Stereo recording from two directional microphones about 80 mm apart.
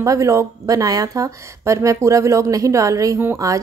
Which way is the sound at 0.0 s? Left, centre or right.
Right.